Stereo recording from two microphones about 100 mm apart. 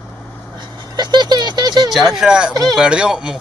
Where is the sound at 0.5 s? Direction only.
50° right (ahead or behind).